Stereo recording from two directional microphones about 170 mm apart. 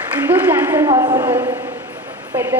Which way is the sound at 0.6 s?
20° right (ahead or behind).